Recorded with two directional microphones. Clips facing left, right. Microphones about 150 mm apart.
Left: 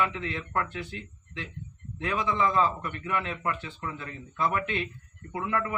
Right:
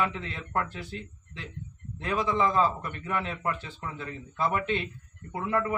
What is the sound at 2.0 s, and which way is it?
A man's voice, 35° right (ahead or behind).